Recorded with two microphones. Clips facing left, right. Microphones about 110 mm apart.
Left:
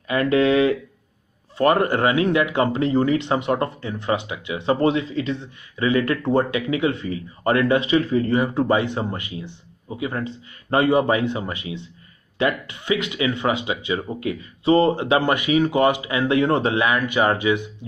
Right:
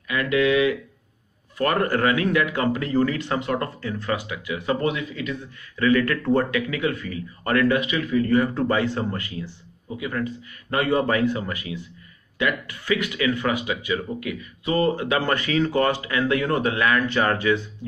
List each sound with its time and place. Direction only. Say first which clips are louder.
0.1 s speech: left 3 dB; 35° left (ahead or behind)
1.6 s speech: left 3 dB; 20° left (ahead or behind)
8.4 s speech: left 2 dB; 20° left (ahead or behind)